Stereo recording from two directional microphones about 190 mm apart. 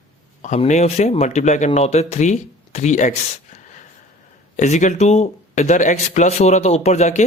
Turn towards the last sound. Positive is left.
turn(degrees=35)  # may be behind; listen again after turning